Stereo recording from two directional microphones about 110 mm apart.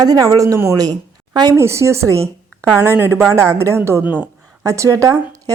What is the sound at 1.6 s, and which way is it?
A woman's voice, 25° right (ahead or behind).